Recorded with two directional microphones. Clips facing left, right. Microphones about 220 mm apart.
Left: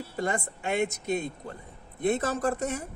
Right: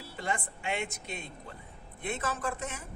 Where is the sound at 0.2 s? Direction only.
40° left (ahead or behind).